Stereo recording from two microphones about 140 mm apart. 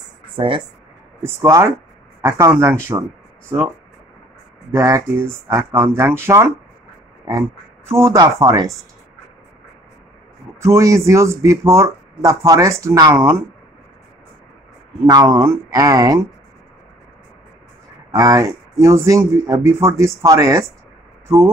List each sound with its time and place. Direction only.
0.4 s speech: 35° right (ahead or behind)
1.2 s speech: 20° right (ahead or behind)
4.7 s speech: 20° right (ahead or behind)
7.9 s speech: 20° right (ahead or behind)
10.6 s speech: 20° right (ahead or behind)
15.0 s speech: 25° right (ahead or behind)
18.1 s speech: 25° right (ahead or behind)